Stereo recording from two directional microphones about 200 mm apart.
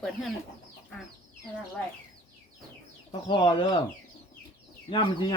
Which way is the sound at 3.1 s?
25° left (ahead or behind).